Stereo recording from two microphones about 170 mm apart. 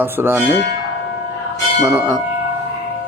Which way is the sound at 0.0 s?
15° right (ahead or behind).